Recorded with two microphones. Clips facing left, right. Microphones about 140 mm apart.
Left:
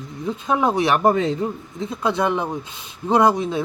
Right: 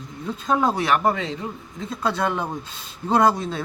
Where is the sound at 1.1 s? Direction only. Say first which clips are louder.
Left 8 dB; 35° left (ahead or behind).